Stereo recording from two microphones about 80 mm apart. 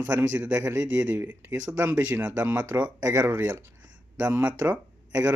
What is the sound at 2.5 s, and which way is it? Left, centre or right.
Speech, centre.